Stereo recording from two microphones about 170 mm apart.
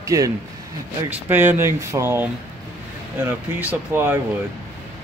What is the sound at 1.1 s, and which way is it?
Speech, 10° right (ahead or behind).